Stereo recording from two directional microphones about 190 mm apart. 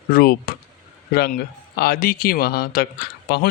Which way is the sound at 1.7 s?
55° left (ahead or behind).